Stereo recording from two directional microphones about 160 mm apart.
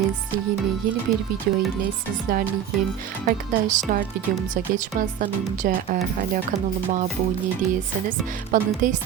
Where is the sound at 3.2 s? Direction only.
50° right (ahead or behind).